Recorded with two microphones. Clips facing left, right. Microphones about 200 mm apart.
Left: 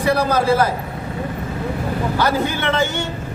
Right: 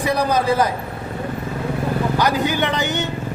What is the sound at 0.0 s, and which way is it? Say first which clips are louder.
Speech: left 2 dB; 15° right (ahead or behind).